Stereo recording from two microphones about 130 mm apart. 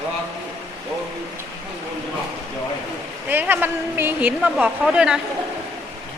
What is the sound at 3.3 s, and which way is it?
A woman's voice, 15° right (ahead or behind).